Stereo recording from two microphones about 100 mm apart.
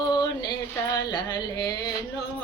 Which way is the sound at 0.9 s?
45° left (ahead or behind).